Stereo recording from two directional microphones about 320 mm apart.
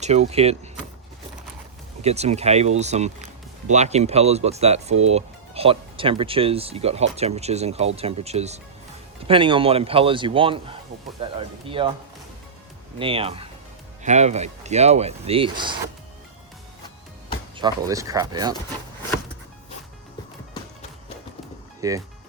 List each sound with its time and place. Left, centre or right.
0.0 s speech: centre
2.0 s a man's voice: centre
13.0 s a man's voice: centre
17.6 s a man's voice: centre
21.8 s speech: centre